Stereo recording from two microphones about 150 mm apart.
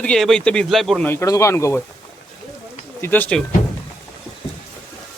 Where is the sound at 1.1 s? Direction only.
20° left (ahead or behind).